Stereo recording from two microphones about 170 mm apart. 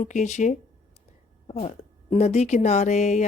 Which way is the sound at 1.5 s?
35° left (ahead or behind).